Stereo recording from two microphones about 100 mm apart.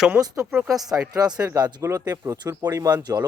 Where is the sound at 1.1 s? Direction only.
40° right (ahead or behind).